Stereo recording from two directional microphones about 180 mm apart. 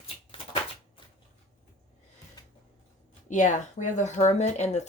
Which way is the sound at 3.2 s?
45° left (ahead or behind).